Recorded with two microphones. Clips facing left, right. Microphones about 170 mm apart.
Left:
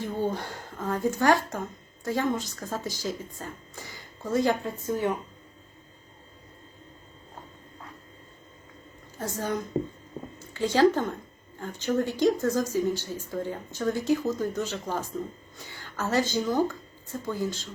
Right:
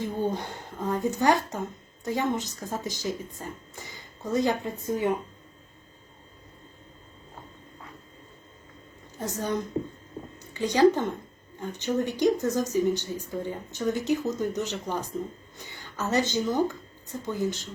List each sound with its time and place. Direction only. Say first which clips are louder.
0.0 s speech: right 1 dB; 20° right (ahead or behind)
9.1 s speech: right 1 dB; 20° right (ahead or behind)